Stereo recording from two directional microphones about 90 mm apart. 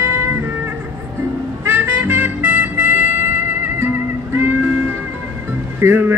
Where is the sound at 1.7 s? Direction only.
20° right (ahead or behind).